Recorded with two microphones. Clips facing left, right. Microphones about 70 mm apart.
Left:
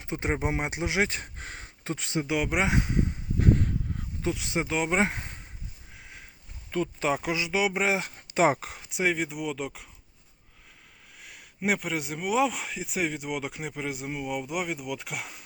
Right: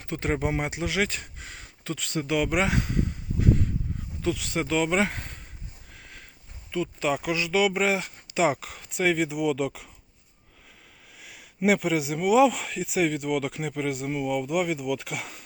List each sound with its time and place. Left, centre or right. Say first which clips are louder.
0.0 s speech: right 2 dB; centre
3.4 s a sound: even; left
4.2 s speech: right 2 dB; left
5.9 s sniff: right 1 dB; centre
6.7 s speech: even; left
7.0 s speech: right 2 dB; left
7.3 s speech: right 3 dB; centre
8.0 s speech: left 1 dB; left
8.9 s speech: right 3 dB; centre
11.2 s speech: right 6 dB; centre